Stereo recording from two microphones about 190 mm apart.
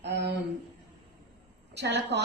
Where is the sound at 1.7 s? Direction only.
65° right (ahead or behind).